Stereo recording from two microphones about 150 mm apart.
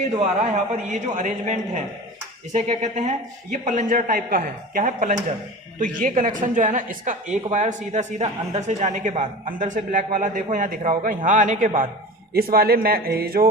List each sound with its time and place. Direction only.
0.4 s a man's voice: 50° right (ahead or behind)
12.3 s speech: 90° right